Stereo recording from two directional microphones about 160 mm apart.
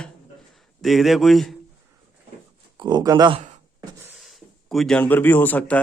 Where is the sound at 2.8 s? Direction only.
25° right (ahead or behind).